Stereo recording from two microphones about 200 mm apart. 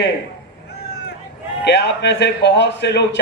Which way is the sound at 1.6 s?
60° left (ahead or behind).